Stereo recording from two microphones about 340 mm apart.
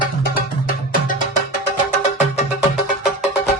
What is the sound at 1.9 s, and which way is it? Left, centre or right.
Music, left.